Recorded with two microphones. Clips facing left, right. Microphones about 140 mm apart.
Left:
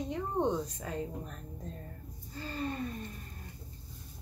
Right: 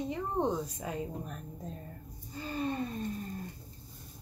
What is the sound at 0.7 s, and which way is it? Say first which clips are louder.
Speech: right 1 dB; 10° right (ahead or behind).